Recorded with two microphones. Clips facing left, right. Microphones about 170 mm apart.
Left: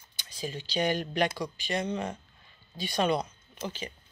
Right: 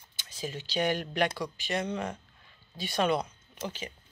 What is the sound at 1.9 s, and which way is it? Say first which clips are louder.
Speech: left 1 dB; 30° left (ahead or behind).